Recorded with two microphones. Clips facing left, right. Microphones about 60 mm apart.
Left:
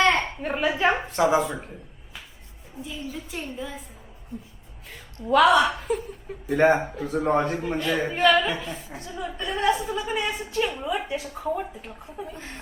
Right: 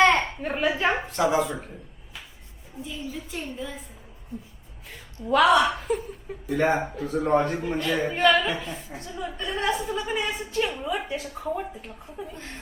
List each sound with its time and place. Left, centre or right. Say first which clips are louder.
0.4 s a woman's voice: left 4 dB; centre
1.0 s a woman's voice: left 2 dB; left
2.8 s a woman's voice: even; centre
4.9 s a woman's voice: left 1 dB; centre
6.5 s speech: left 4 dB; left
6.7 s a woman's voice: even; centre